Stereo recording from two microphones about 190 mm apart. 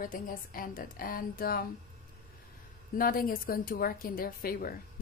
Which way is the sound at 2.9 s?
50° left (ahead or behind).